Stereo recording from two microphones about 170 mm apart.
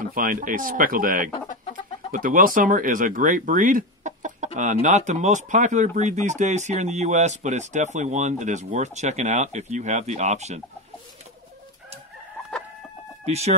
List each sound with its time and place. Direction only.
0.1 s speech: 55° right (ahead or behind)
13.2 s speech: 40° right (ahead or behind)